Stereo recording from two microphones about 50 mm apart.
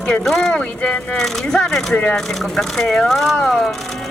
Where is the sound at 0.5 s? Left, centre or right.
Left.